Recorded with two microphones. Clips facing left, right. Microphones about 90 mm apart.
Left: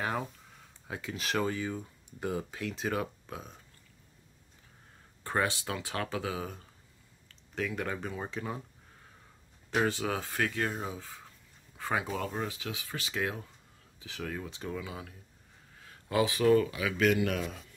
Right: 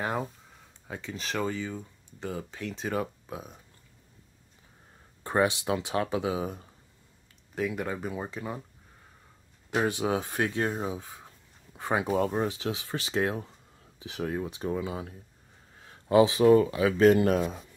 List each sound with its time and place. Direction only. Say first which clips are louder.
0.0 s speech: right 3 dB; 10° right (ahead or behind)
0.8 s speech: even; 5° left (ahead or behind)
5.2 s speech: right 5 dB; 20° right (ahead or behind)
7.5 s speech: right 3 dB; 10° right (ahead or behind)
9.8 s speech: right 3 dB; 15° right (ahead or behind)